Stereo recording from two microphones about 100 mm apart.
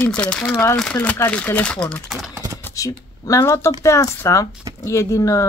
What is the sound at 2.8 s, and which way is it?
Speech, 35° left (ahead or behind).